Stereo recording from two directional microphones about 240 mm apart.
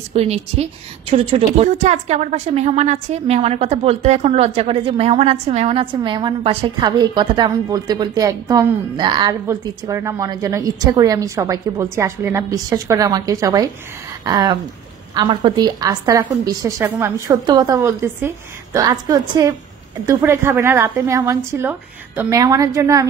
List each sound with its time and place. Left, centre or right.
0.1 s a woman's voice: right